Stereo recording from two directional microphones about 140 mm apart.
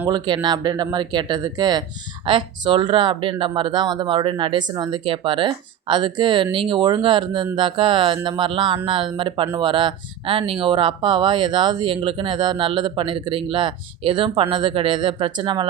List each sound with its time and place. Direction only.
0.1 s speech: 30° right (ahead or behind)